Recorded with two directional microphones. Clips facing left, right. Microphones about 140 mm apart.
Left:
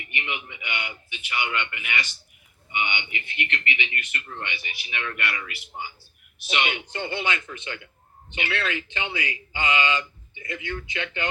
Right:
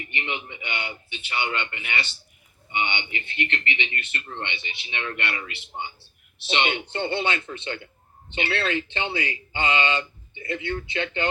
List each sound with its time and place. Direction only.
0.0 s a man's voice: 30° right (ahead or behind)